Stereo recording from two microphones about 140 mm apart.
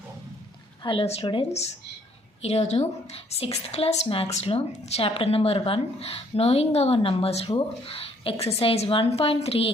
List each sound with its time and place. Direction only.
0.8 s a woman's voice: 40° left (ahead or behind)
2.4 s a woman's voice: 50° left (ahead or behind)